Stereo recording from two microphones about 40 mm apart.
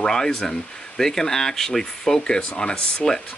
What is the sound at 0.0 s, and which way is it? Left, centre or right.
Speech, centre.